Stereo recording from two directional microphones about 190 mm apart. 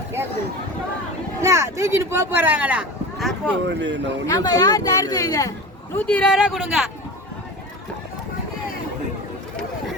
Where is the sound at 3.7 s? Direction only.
70° right (ahead or behind).